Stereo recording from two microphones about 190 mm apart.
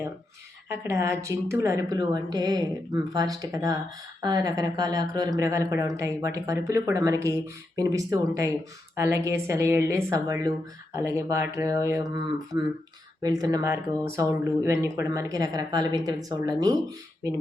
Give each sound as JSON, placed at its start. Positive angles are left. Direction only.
{"t": 0.9, "sound": "a woman's voice", "side_deg": -15}